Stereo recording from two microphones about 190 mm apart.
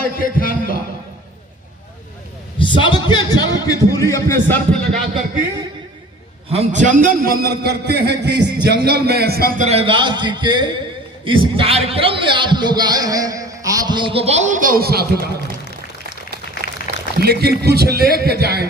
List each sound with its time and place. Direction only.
0.0 s a man's voice: 50° left (ahead or behind)
2.6 s a man's voice: 25° left (ahead or behind); by 5.2 s 5° left (ahead or behind)
6.5 s a man's voice: 40° right (ahead or behind)
9.6 s a man's voice: 30° right (ahead or behind); by 15.2 s 55° right (ahead or behind)
16.6 s a sound: 60° right (ahead or behind)
17.2 s a man's voice: 55° right (ahead or behind)